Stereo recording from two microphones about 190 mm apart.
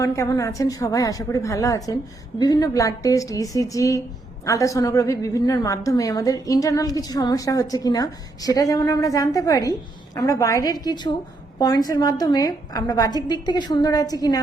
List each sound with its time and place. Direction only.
0.0 s a woman's voice: 15° left (ahead or behind)